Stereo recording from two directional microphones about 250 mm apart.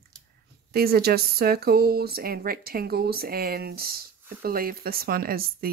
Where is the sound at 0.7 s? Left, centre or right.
Right.